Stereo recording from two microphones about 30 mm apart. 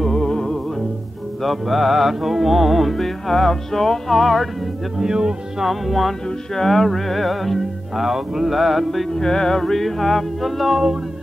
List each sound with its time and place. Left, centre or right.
0.0 s music: centre
1.4 s music: centre
4.9 s speech: right
5.6 s music: centre
6.5 s music: centre
8.0 s music: centre
9.2 s music: centre